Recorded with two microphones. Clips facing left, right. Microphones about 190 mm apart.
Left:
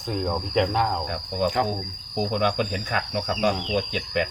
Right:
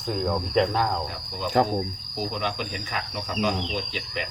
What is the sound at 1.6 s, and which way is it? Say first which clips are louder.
Speech: right 7 dB; 40° right (ahead or behind).